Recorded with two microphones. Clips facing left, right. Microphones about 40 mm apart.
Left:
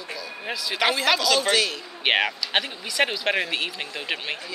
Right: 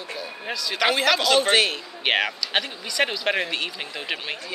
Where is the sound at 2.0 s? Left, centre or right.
Centre.